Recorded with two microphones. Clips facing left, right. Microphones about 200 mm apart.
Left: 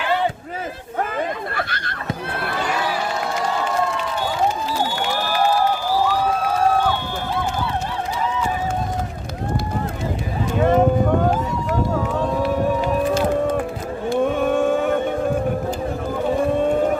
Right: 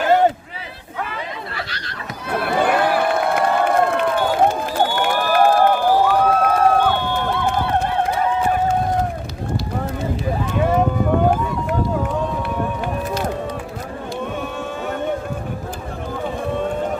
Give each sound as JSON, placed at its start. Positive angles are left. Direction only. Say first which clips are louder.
{"t": 0.0, "sound": "a sound", "louder": "right 6 dB", "side_deg": -45}
{"t": 2.6, "sound": "crowd", "louder": "right 7 dB", "side_deg": -55}
{"t": 14.1, "sound": "cattle", "louder": "left 9 dB", "side_deg": 55}